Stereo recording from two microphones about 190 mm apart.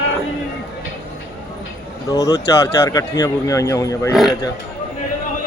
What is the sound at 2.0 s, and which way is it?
A man's voice, 20° left (ahead or behind).